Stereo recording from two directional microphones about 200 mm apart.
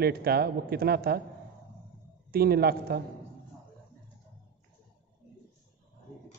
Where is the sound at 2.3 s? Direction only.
50° right (ahead or behind).